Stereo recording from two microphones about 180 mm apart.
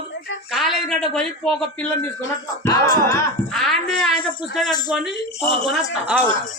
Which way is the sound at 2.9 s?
15° left (ahead or behind).